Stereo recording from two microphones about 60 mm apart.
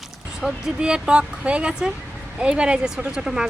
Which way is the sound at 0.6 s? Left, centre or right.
Centre.